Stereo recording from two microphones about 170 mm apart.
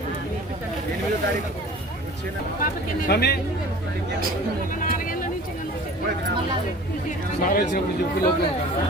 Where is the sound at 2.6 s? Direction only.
65° left (ahead or behind).